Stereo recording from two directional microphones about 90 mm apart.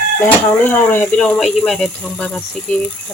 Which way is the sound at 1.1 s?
15° left (ahead or behind).